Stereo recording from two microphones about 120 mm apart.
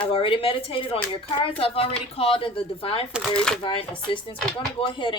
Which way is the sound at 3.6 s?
45° left (ahead or behind).